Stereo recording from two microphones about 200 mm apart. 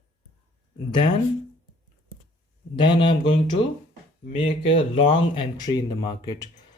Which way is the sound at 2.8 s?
25° left (ahead or behind).